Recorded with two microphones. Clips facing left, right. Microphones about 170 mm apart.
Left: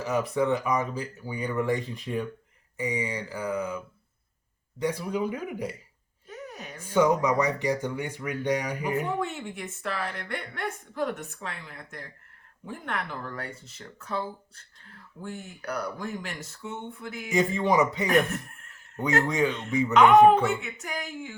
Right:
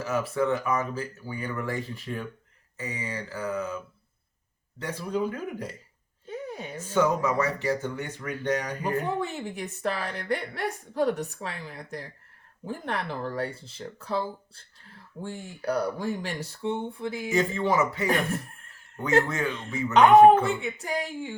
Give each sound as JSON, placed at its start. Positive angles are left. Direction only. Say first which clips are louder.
{"t": 0.0, "sound": "speech", "louder": "left 1 dB", "side_deg": 15}
{"t": 6.2, "sound": "a sound", "louder": "right 5 dB", "side_deg": -30}
{"t": 6.7, "sound": "speech", "louder": "left 2 dB", "side_deg": 10}
{"t": 9.0, "sound": "a woman's voice", "louder": "right 1 dB", "side_deg": -35}
{"t": 17.3, "sound": "a man's voice", "louder": "left 2 dB", "side_deg": 15}
{"t": 19.9, "sound": "a woman's voice", "louder": "right 2 dB", "side_deg": -35}